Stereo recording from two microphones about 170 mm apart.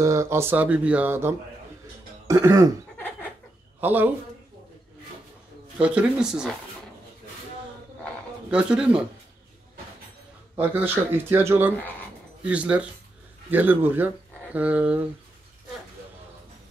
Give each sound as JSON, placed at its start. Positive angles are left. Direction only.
{"t": 0.0, "sound": "speech", "side_deg": -15}
{"t": 2.2, "sound": "throat clearing", "side_deg": -20}
{"t": 3.8, "sound": "speech", "side_deg": -10}
{"t": 5.8, "sound": "speech", "side_deg": -5}
{"t": 8.5, "sound": "speech", "side_deg": -5}
{"t": 10.6, "sound": "speech", "side_deg": -10}